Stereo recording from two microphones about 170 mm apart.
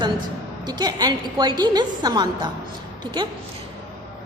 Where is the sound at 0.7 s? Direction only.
25° right (ahead or behind).